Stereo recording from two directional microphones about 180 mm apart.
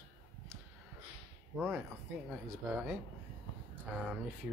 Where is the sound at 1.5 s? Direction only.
5° right (ahead or behind).